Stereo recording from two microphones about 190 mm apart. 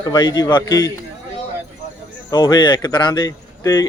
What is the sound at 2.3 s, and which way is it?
Speech, 20° left (ahead or behind).